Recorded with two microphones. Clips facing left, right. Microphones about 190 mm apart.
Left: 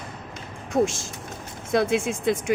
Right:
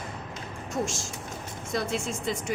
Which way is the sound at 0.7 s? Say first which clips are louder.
Left 9 dB; 55° left (ahead or behind).